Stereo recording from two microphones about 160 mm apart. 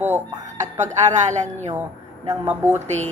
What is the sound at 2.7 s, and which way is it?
Speech, 45° right (ahead or behind).